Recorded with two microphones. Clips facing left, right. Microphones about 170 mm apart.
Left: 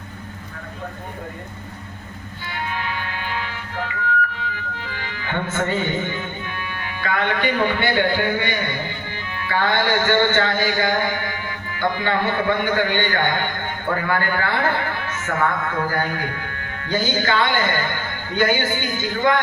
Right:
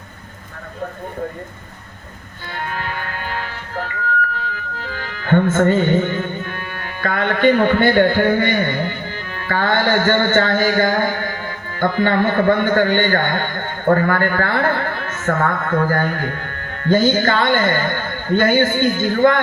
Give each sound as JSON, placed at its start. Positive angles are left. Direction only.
{"t": 2.5, "sound": "music", "side_deg": -45}